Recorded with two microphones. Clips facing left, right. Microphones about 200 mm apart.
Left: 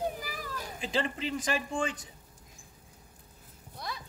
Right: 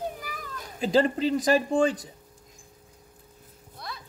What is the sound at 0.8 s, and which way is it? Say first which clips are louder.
Speech: right 10 dB; 40° right (ahead or behind).